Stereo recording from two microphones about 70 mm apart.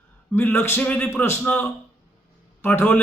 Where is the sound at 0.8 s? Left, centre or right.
Left.